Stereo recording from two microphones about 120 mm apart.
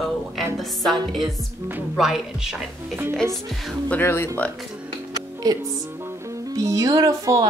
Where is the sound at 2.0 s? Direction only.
5° right (ahead or behind).